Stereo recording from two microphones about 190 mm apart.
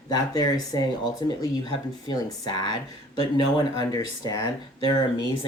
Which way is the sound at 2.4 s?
25° left (ahead or behind).